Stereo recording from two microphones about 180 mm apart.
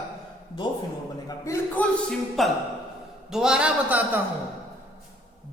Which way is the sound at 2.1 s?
Centre (ahead or behind).